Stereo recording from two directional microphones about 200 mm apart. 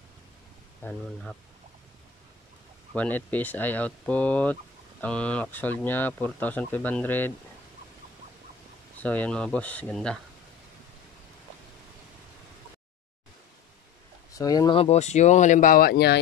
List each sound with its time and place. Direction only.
0.8 s speech: 5° left (ahead or behind)
2.9 s speech: 10° left (ahead or behind)
8.9 s speech: 10° left (ahead or behind)
14.4 s speech: 20° left (ahead or behind); by 16.2 s 55° left (ahead or behind)